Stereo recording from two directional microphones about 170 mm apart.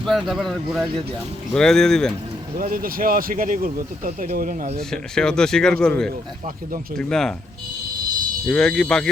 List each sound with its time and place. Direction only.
0.0 s a man's voice: centre (ahead or behind)
2.6 s speech: 55° right (ahead or behind)
4.8 s a man's voice: 5° left (ahead or behind)
8.4 s a man's voice: 5° left (ahead or behind)